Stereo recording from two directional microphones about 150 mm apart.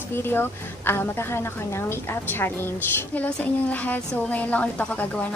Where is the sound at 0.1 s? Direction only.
15° left (ahead or behind).